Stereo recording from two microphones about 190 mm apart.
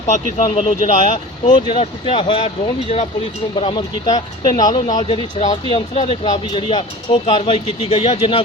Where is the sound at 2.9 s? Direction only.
35° left (ahead or behind).